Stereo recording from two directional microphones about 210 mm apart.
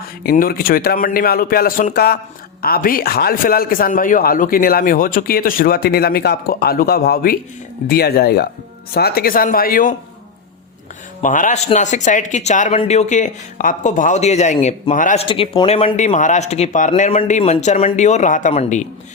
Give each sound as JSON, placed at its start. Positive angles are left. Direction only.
{"t": 0.3, "sound": "a man's voice", "side_deg": 45}
{"t": 11.2, "sound": "speech", "side_deg": 40}